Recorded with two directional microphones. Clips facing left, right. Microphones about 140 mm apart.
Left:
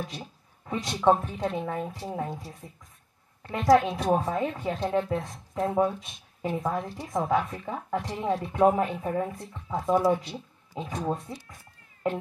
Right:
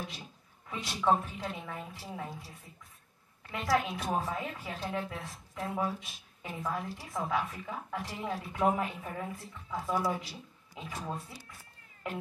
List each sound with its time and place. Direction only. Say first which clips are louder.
0.7 s a woman's voice: left 6 dB; 35° left (ahead or behind)
12.0 s speech: left 10 dB; 35° left (ahead or behind)